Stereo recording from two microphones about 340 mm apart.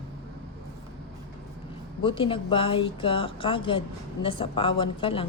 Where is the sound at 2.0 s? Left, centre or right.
Centre.